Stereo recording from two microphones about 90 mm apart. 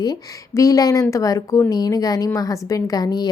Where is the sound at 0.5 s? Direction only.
40° left (ahead or behind).